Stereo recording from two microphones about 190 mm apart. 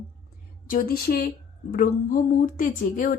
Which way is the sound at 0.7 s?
50° left (ahead or behind).